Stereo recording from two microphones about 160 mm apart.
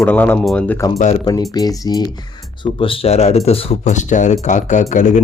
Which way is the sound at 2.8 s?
35° left (ahead or behind).